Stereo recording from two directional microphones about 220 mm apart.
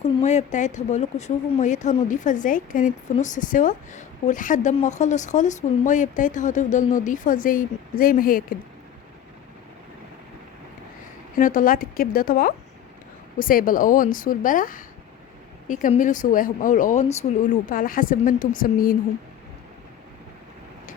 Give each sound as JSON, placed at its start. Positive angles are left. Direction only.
{"t": 0.0, "sound": "speech", "side_deg": 30}
{"t": 11.3, "sound": "speech", "side_deg": 35}